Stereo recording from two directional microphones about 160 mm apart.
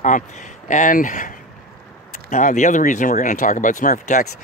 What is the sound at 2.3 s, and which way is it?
Speech, 50° left (ahead or behind).